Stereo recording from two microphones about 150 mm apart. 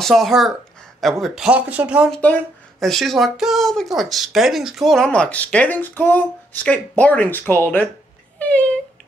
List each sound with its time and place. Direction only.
0.0 s speech: centre (ahead or behind)
2.1 s speech: 10° left (ahead or behind)
8.4 s a sound: 10° left (ahead or behind)